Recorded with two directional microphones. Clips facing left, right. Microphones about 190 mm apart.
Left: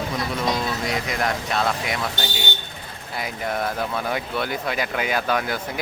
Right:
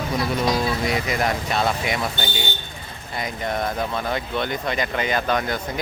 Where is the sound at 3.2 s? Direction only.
5° left (ahead or behind).